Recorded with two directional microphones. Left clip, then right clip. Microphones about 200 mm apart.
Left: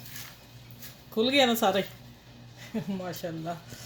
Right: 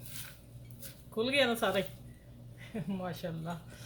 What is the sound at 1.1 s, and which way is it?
Speech, 50° left (ahead or behind).